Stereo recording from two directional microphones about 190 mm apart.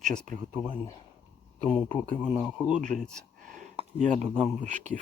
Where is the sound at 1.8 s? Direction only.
10° left (ahead or behind).